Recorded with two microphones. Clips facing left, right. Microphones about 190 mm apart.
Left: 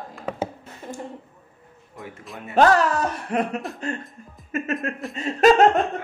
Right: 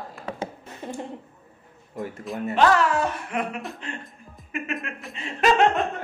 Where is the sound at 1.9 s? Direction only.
Centre (ahead or behind).